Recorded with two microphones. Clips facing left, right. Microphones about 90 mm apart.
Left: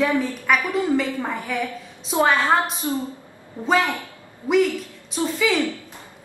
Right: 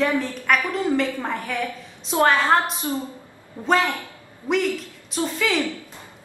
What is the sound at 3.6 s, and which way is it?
A woman's voice, 20° left (ahead or behind).